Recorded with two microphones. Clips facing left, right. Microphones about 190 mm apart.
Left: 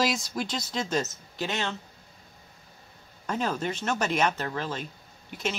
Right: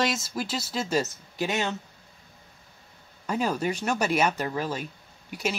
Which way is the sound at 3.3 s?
10° right (ahead or behind).